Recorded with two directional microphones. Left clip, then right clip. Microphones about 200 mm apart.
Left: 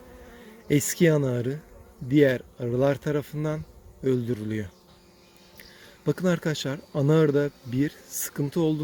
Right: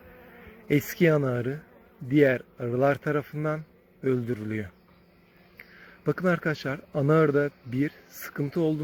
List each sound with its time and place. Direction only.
0.7 s speech: 25° left (ahead or behind)
6.1 s speech: 25° left (ahead or behind)